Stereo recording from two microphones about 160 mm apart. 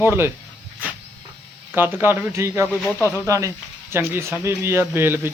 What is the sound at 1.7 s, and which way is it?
Speech, 15° right (ahead or behind).